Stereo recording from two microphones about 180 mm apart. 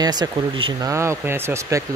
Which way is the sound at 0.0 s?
25° right (ahead or behind).